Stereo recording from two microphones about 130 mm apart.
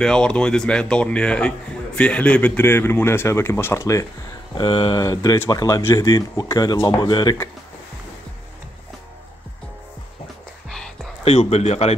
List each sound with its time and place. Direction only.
0.0 s speech: 5° left (ahead or behind); by 4.1 s 25° left (ahead or behind)
4.6 s speech: 45° left (ahead or behind)
4.9 s speech: 30° left (ahead or behind)
11.2 s speech: 55° left (ahead or behind)